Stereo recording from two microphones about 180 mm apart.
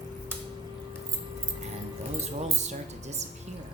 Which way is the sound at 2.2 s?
40° right (ahead or behind).